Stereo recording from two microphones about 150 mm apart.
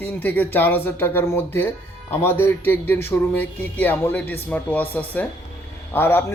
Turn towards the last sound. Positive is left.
turn(degrees=15)  # may be behind; listen again after turning